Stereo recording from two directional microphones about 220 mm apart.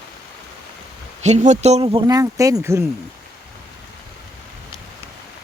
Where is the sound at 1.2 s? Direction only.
30° right (ahead or behind); by 2.8 s 10° right (ahead or behind).